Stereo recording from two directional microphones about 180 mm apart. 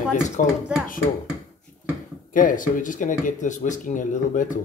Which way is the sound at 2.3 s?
50° left (ahead or behind).